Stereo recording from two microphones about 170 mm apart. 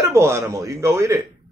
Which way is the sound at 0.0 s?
15° right (ahead or behind).